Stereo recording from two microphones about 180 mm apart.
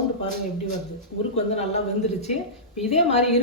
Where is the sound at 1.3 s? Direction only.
40° left (ahead or behind).